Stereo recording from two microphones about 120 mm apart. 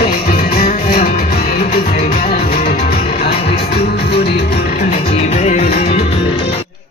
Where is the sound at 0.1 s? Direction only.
90° left; by 6.6 s 50° left (ahead or behind).